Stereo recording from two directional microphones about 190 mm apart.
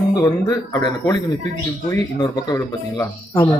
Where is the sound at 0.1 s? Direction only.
20° left (ahead or behind).